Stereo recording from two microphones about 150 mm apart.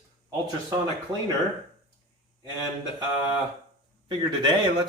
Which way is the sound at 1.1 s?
25° right (ahead or behind).